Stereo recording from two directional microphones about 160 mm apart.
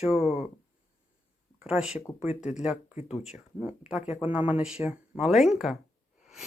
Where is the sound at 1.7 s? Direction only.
5° right (ahead or behind).